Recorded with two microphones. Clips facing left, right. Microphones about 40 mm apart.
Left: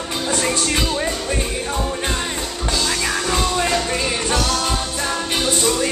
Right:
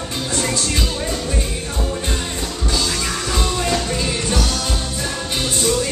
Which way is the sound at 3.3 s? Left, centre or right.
Left.